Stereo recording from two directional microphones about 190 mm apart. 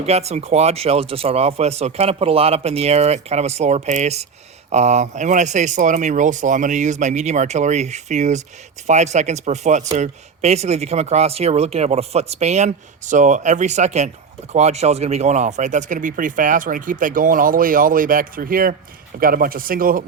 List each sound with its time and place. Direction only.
0.0 s speech: 35° right (ahead or behind)